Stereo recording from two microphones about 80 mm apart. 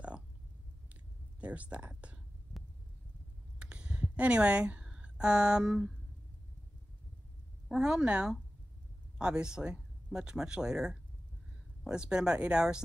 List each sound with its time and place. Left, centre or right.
1.4 s speech: centre
3.5 s a sound: centre
7.6 s speech: centre